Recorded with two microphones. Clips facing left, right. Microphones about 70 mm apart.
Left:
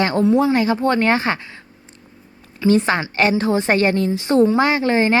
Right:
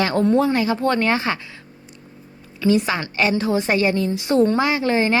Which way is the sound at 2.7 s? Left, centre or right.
Left.